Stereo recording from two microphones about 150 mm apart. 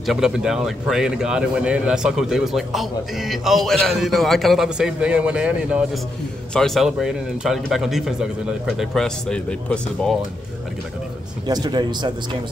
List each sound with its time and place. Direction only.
0.0 s speech: centre (ahead or behind)
11.4 s speech: 25° right (ahead or behind)